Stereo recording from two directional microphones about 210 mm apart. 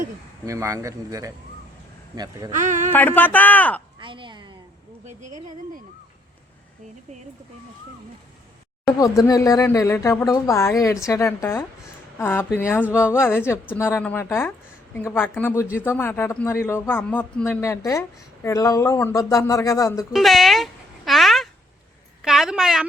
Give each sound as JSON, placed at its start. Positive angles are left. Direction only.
{"t": 0.4, "sound": "speech", "side_deg": -15}
{"t": 2.5, "sound": "speech", "side_deg": -35}
{"t": 2.9, "sound": "speech", "side_deg": 10}
{"t": 4.0, "sound": "a sound", "side_deg": -25}
{"t": 9.0, "sound": "speech", "side_deg": 15}
{"t": 20.1, "sound": "a sound", "side_deg": 0}